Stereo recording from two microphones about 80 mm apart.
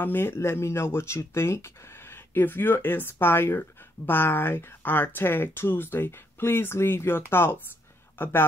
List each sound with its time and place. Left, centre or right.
0.0 s speech: left